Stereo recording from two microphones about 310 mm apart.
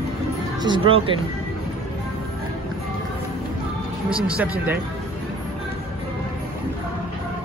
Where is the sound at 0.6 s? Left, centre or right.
Centre.